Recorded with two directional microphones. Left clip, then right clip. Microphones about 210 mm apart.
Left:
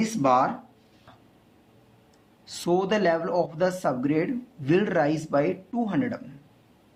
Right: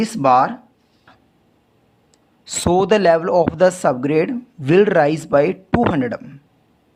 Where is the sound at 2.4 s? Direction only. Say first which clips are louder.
Right 9 dB; 45° right (ahead or behind).